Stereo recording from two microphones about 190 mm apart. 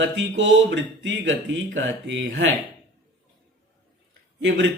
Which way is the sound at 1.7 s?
75° right (ahead or behind).